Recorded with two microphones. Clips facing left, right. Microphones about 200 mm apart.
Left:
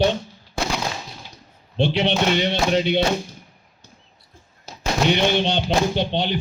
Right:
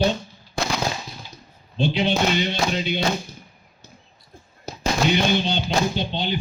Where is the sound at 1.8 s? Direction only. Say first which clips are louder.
Left 1 dB; 70° left (ahead or behind).